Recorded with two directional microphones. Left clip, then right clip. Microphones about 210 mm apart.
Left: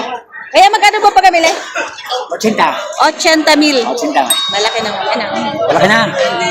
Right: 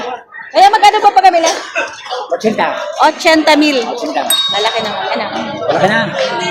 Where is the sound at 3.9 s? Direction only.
50° left (ahead or behind).